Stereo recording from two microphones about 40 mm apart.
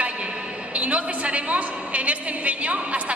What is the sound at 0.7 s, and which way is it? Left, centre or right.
A woman's voice, right.